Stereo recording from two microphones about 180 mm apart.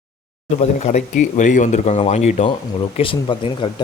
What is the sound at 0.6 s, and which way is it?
Speech, 40° left (ahead or behind).